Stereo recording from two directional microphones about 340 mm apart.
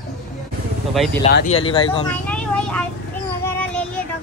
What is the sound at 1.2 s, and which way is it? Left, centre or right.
Speech, left.